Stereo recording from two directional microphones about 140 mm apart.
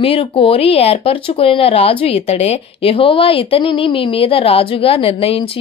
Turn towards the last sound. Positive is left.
turn(degrees=45)  # may be behind; listen again after turning